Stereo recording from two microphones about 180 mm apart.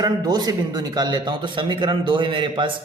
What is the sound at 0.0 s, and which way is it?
A man's voice, 20° right (ahead or behind).